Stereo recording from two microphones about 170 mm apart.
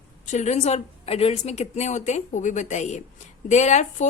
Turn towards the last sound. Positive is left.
turn(degrees=45)  # may be behind; listen again after turning